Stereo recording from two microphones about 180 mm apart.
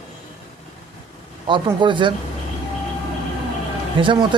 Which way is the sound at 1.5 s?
25° right (ahead or behind).